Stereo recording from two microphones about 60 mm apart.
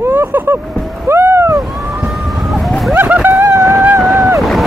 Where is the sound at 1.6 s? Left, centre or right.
Centre.